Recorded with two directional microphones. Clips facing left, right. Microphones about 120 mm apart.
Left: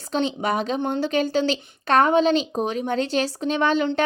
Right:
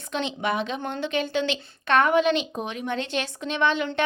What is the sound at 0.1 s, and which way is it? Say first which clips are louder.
A woman's voice: left 4 dB; 35° left (ahead or behind).